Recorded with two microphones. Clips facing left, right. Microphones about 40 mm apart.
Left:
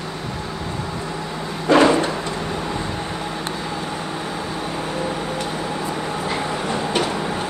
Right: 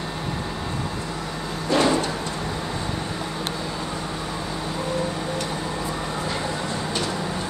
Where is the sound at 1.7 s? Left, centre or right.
Left.